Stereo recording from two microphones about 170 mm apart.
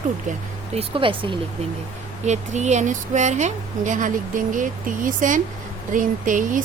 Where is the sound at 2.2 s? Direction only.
45° right (ahead or behind).